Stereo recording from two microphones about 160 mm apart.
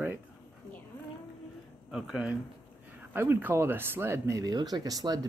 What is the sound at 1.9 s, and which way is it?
Speech, 5° right (ahead or behind).